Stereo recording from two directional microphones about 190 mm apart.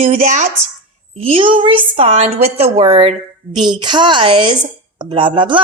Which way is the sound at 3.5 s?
25° right (ahead or behind).